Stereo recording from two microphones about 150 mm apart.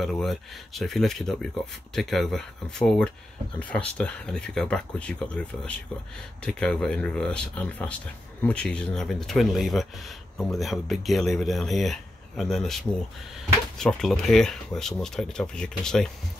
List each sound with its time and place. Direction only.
0.0 s speech: centre (ahead or behind)